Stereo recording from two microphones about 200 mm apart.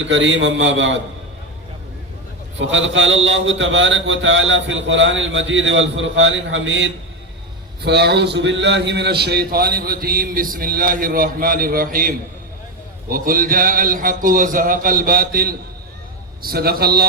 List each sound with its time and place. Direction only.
0.0 s a man's voice: 65° right (ahead or behind)
2.6 s a man's voice: 70° right (ahead or behind); by 17.1 s 50° right (ahead or behind)